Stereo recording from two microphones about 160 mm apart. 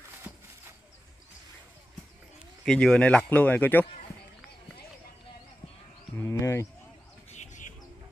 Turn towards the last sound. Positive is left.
turn(degrees=20)  # may be behind; listen again after turning